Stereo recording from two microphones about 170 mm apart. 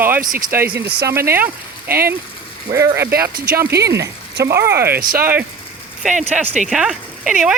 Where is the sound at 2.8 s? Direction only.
15° right (ahead or behind).